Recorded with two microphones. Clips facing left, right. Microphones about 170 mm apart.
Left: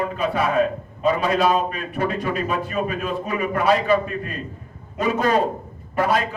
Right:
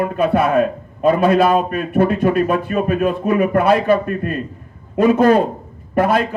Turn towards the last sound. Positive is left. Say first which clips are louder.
# right 5 dB
turn(degrees=-55)  # may be behind; listen again after turning